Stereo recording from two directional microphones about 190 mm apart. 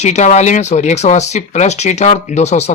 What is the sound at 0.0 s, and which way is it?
Speech, 35° left (ahead or behind).